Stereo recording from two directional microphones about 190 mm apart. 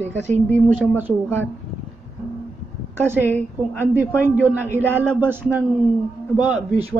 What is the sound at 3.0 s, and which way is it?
A woman's voice, 10° right (ahead or behind).